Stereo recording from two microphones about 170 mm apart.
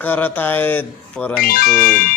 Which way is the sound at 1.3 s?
60° left (ahead or behind).